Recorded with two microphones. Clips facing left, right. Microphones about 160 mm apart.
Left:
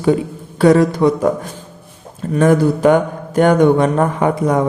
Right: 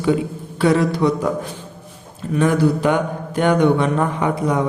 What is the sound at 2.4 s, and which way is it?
Speech, 45° left (ahead or behind).